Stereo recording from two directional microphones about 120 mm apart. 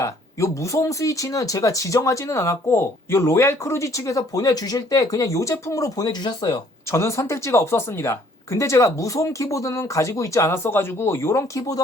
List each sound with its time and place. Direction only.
0.0 s speech: 25° left (ahead or behind)